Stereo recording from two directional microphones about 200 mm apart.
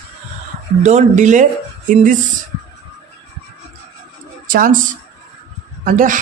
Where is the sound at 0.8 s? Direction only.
35° right (ahead or behind).